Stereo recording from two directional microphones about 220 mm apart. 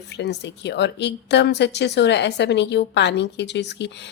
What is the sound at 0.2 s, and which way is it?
A woman's voice, 50° left (ahead or behind).